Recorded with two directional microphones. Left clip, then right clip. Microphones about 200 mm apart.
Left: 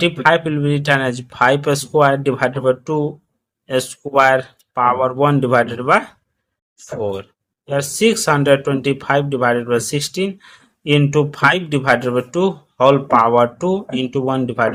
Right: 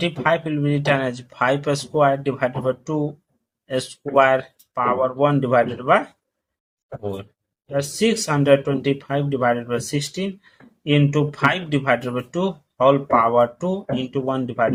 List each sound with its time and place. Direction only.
0.0 s speech: 30° left (ahead or behind)
7.7 s speech: 30° left (ahead or behind)